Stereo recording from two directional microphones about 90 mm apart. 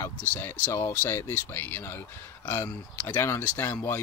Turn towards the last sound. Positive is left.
turn(degrees=25)  # may be behind; listen again after turning